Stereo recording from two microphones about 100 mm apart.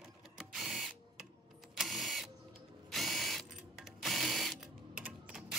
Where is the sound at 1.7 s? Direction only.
Centre (ahead or behind).